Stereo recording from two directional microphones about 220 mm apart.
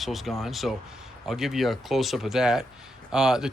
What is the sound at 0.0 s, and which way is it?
Speech, centre (ahead or behind).